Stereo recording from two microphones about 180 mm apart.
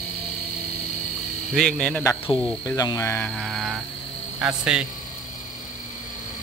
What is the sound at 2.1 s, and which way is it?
Speech, 30° left (ahead or behind).